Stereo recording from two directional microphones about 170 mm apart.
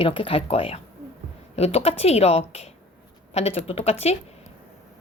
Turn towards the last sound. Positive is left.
turn(degrees=40)  # may be behind; listen again after turning